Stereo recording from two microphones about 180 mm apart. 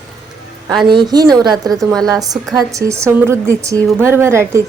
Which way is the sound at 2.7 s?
15° right (ahead or behind).